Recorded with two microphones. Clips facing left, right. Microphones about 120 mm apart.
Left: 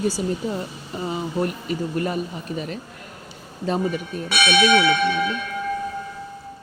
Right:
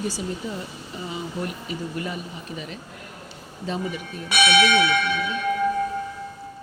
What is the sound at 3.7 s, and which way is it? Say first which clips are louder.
Speech: left 6 dB; 45° left (ahead or behind).